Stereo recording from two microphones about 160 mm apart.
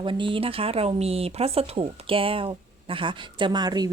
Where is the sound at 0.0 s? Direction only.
30° right (ahead or behind).